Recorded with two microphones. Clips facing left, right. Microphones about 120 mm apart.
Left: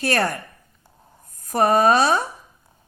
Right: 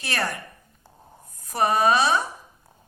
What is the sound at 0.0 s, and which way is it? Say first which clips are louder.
Speech: left 7 dB; 50° left (ahead or behind).